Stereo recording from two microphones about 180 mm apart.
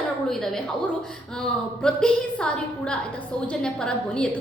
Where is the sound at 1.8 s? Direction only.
5° left (ahead or behind).